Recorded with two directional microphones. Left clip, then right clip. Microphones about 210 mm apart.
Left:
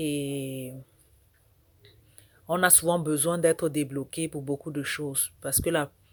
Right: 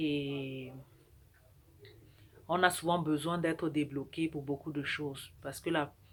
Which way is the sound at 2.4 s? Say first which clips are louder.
Left 5 dB; 45° left (ahead or behind).